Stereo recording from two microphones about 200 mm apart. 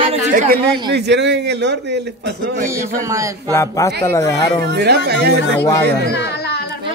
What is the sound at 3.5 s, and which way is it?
A man's voice, 15° left (ahead or behind).